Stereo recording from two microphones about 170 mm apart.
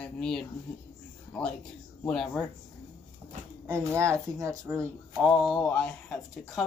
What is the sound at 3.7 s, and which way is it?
Speech, 15° right (ahead or behind).